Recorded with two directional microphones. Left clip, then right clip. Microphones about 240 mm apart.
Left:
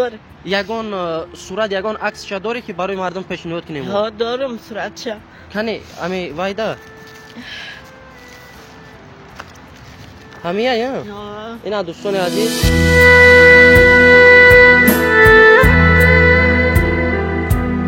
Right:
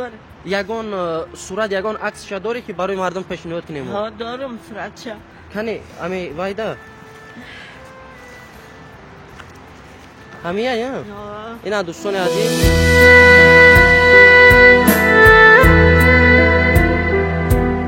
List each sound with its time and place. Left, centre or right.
0.5 s speech: centre
3.0 s speech: centre
3.3 s speech: centre
3.9 s speech: left
5.5 s speech: centre
10.4 s speech: centre
11.1 s speech: left
11.6 s music: centre